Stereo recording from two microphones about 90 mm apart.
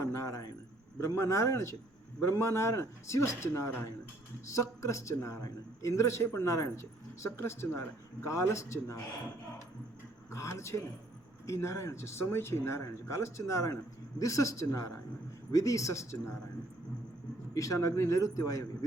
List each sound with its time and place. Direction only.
0.0 s a sound: 35° left (ahead or behind)
0.9 s a man's voice: 30° left (ahead or behind)
10.3 s a man's voice: 35° left (ahead or behind)
17.5 s a man's voice: 40° left (ahead or behind)